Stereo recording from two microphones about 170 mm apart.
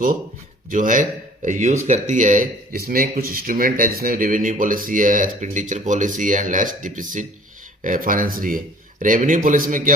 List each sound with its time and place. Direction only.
0.7 s speech: 50° right (ahead or behind)